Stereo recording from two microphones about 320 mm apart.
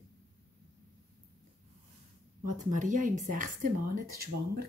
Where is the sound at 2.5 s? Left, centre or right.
Right.